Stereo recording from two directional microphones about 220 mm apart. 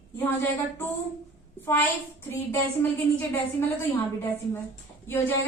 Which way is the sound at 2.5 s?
10° left (ahead or behind).